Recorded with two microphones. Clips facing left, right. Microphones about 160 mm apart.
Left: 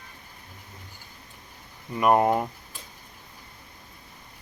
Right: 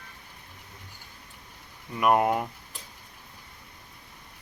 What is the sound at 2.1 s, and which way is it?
Speech, 30° left (ahead or behind).